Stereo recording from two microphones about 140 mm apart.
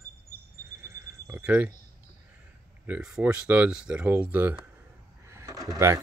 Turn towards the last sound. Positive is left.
turn(degrees=-25)  # may be behind; listen again after turning